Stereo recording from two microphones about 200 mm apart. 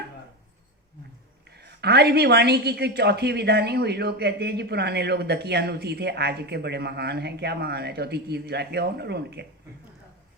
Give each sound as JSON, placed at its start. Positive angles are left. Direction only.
{"t": 1.5, "sound": "a woman's voice", "side_deg": -55}